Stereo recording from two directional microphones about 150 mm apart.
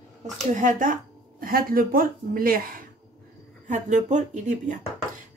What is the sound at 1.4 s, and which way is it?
A woman's voice, 70° right (ahead or behind).